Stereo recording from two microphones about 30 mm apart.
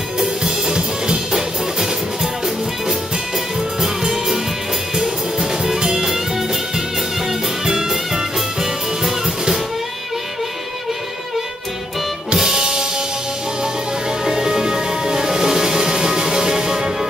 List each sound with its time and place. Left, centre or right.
0.4 s music: right
3.8 s music: centre
6.0 s music: centre
12.4 s music: centre
14.2 s music: right